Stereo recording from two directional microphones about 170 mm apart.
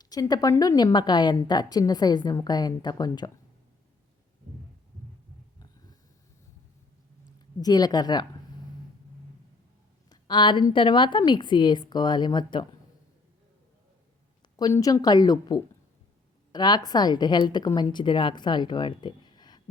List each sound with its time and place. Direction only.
0.0 s a woman's voice: 20° left (ahead or behind)
7.3 s a woman's voice: 25° left (ahead or behind)
10.1 s a woman's voice: 25° left (ahead or behind)
14.5 s a woman's voice: 20° left (ahead or behind)